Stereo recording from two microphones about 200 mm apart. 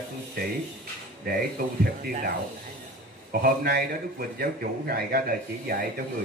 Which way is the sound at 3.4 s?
50° right (ahead or behind).